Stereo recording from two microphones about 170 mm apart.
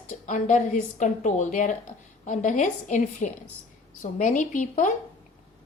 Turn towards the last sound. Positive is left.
turn(degrees=50)  # may be behind; listen again after turning